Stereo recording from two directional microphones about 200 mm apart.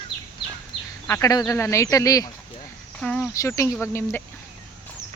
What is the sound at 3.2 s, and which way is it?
Speech, 15° left (ahead or behind).